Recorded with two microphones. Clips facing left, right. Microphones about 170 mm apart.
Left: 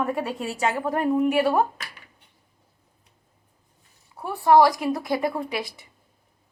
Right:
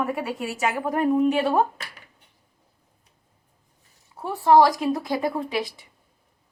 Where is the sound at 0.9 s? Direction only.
15° right (ahead or behind).